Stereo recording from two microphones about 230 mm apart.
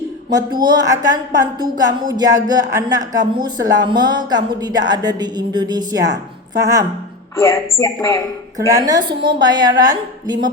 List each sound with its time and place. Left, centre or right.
0.3 s speech: centre
7.3 s speech: centre
8.5 s speech: centre